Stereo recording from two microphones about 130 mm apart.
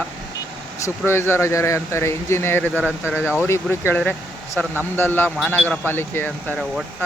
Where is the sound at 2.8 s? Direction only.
10° right (ahead or behind).